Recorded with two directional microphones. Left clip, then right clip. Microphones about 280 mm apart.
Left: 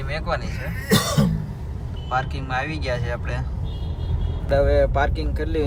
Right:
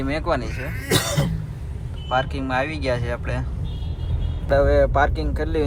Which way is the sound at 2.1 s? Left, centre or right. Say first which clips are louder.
Right 2 dB; centre.